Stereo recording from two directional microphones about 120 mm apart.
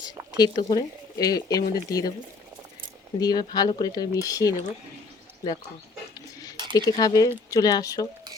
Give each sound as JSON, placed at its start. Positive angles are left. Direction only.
{"t": 0.3, "sound": "speech", "side_deg": 35}
{"t": 3.2, "sound": "speech", "side_deg": 35}
{"t": 6.7, "sound": "speech", "side_deg": 30}